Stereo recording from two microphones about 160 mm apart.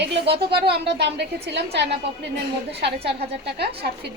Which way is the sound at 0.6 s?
90° right.